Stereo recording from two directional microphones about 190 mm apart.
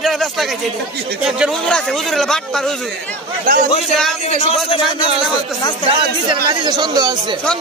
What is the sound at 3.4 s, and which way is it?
Speech, 50° right (ahead or behind).